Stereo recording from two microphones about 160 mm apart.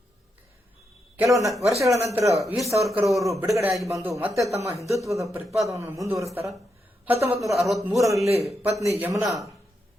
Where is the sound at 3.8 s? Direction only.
20° right (ahead or behind).